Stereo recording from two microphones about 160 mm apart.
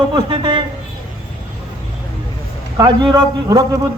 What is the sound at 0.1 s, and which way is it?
Speech, 30° right (ahead or behind).